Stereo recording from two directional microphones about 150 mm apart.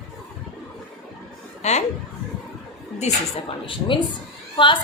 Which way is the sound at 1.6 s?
45° left (ahead or behind).